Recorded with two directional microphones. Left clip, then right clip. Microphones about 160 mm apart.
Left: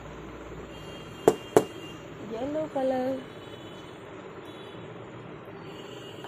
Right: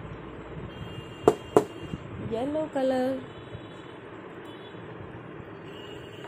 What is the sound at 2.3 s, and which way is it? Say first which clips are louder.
Speech: right 2 dB; 15° right (ahead or behind).